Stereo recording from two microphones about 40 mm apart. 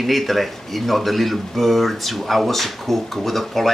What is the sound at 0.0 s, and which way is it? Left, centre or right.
Speech, centre.